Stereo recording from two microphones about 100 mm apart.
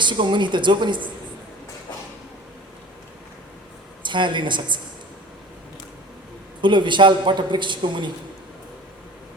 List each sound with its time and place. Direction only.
0.0 s a man's voice: 50° right (ahead or behind)
4.0 s a man's voice: 50° right (ahead or behind)
6.6 s a man's voice: 50° right (ahead or behind)